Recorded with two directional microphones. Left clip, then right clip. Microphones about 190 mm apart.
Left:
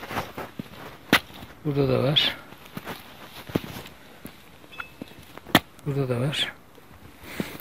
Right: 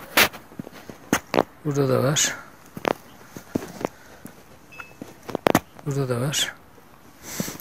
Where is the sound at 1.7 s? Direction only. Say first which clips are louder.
Left 4 dB; centre (ahead or behind).